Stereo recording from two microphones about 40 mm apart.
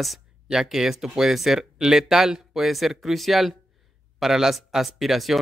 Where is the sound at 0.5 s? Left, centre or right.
Centre.